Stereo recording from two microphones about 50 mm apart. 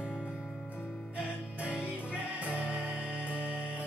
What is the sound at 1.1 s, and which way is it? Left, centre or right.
Music, right.